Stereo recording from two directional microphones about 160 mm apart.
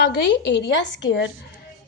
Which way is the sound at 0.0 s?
90° left.